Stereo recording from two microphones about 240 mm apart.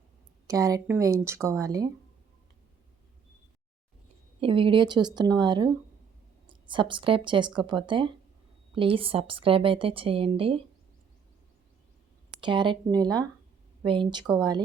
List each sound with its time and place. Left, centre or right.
0.4 s a woman's voice: centre
4.4 s a woman's voice: right
12.4 s a woman's voice: centre